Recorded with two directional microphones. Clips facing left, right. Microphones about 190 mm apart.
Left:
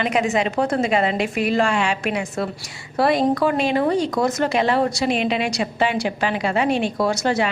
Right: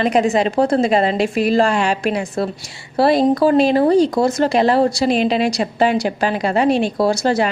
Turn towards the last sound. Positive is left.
turn(degrees=-35)  # may be behind; listen again after turning